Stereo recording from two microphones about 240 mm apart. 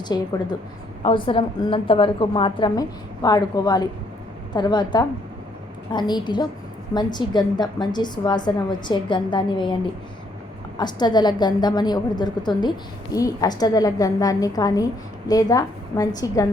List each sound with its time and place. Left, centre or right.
0.1 s a woman's voice: centre
10.8 s a woman's voice: centre